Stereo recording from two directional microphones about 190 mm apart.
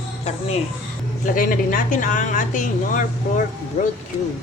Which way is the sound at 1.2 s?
45° left (ahead or behind).